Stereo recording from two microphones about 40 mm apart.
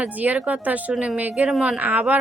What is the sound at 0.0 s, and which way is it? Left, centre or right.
A woman's voice, right.